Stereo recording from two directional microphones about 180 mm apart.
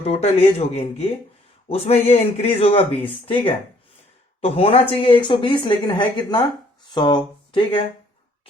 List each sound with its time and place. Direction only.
0.0 s a man's voice: 35° left (ahead or behind)